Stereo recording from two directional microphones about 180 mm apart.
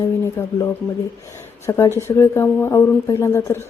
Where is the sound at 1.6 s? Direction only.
15° left (ahead or behind).